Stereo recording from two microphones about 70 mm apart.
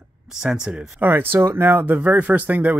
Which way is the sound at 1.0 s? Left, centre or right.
Right.